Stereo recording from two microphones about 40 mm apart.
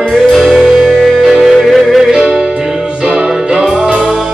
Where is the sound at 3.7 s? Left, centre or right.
Right.